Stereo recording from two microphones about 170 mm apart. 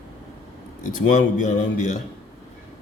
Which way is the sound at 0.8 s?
50° left (ahead or behind).